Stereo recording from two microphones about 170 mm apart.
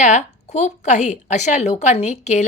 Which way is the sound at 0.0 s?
45° left (ahead or behind).